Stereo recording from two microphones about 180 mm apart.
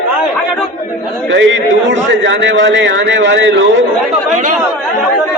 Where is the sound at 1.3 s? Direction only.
90° right.